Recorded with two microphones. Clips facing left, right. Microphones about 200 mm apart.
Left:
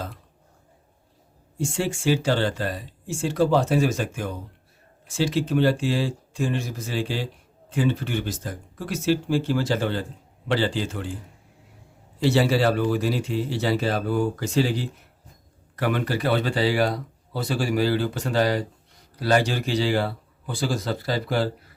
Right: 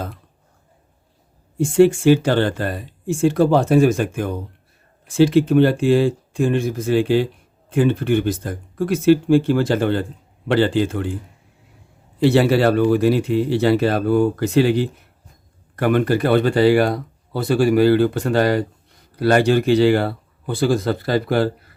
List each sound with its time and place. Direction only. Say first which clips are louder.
1.5 s speech: right 13 dB; 55° right (ahead or behind)
12.2 s speech: right 6 dB; 60° right (ahead or behind)